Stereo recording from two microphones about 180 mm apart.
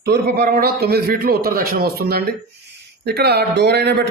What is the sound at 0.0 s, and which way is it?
A man's voice, 65° right (ahead or behind).